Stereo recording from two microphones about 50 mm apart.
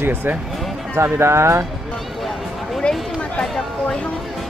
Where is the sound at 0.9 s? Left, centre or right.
Right.